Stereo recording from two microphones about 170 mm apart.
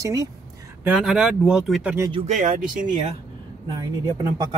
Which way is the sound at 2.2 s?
45° right (ahead or behind).